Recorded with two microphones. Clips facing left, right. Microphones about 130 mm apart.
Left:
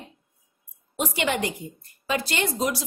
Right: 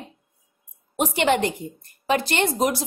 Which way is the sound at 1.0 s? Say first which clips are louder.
Right 5 dB; 45° right (ahead or behind).